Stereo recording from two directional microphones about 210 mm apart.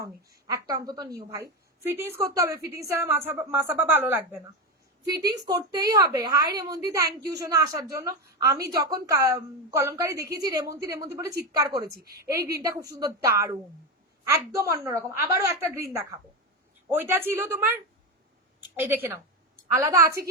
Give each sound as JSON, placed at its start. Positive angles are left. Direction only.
{"t": 0.0, "sound": "a woman's voice", "side_deg": -15}
{"t": 18.8, "sound": "a woman's voice", "side_deg": -10}